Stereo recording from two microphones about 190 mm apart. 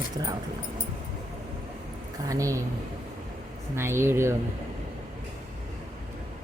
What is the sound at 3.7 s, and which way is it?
Speech, 15° right (ahead or behind).